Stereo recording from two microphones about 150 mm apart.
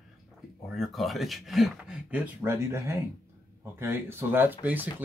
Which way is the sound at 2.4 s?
15° right (ahead or behind).